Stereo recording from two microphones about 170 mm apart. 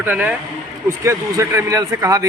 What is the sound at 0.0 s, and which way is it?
A woman's voice, 10° right (ahead or behind).